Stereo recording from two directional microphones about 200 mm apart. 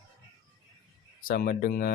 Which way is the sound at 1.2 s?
45° left (ahead or behind).